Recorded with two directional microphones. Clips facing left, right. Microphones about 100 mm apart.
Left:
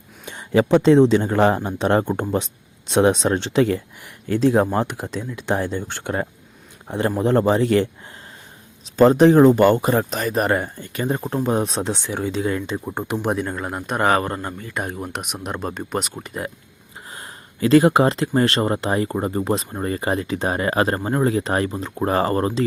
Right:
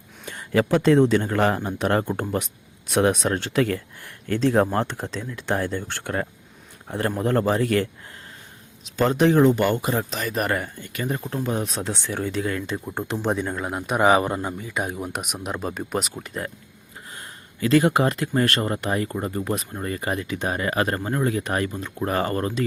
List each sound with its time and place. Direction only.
0.3 s a man's voice: 20° left (ahead or behind)
8.8 s speech: 35° left (ahead or behind); by 13.1 s 15° left (ahead or behind)
13.1 s speech: centre (ahead or behind)
17.1 s speech: 30° left (ahead or behind)